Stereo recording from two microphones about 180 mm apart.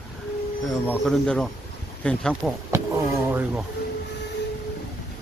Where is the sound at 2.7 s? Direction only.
15° right (ahead or behind).